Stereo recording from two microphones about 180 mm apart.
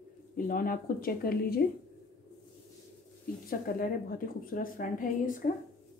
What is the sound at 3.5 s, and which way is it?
A woman's voice, 55° left (ahead or behind).